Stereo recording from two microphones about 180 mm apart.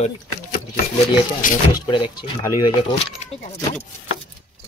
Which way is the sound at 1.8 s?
25° left (ahead or behind).